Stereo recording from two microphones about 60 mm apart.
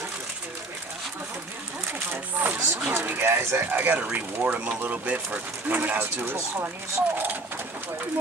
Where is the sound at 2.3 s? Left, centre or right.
Right.